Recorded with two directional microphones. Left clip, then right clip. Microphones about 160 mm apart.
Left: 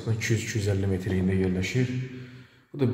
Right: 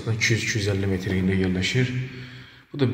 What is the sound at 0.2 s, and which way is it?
A man's voice, 40° left (ahead or behind).